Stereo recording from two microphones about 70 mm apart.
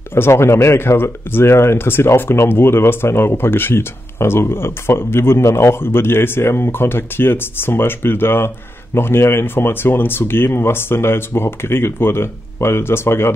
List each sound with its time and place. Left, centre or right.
0.1 s speech: left